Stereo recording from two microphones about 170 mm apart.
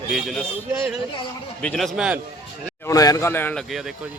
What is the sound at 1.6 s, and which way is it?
Speech, 5° left (ahead or behind).